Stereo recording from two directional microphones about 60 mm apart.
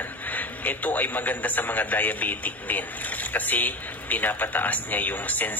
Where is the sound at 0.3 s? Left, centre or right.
Left.